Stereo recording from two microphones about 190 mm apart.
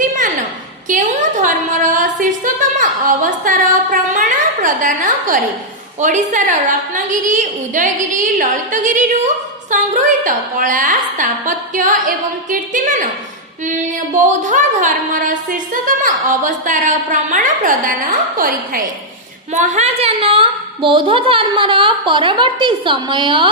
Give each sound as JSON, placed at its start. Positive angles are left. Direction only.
{"t": 0.9, "sound": "a sound", "side_deg": -40}
{"t": 4.6, "sound": "a woman's voice", "side_deg": -40}
{"t": 19.5, "sound": "a woman's voice", "side_deg": -35}